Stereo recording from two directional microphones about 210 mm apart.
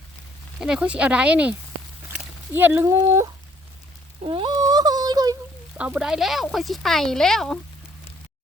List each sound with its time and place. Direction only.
0.6 s speech: 5° right (ahead or behind)
2.6 s speech: 10° right (ahead or behind)
4.3 s a sound: 25° right (ahead or behind)
5.7 s speech: 5° right (ahead or behind)